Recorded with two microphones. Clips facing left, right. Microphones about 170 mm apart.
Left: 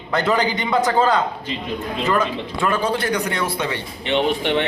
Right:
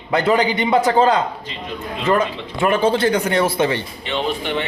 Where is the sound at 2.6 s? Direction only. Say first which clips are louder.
Right 5 dB; 25° right (ahead or behind).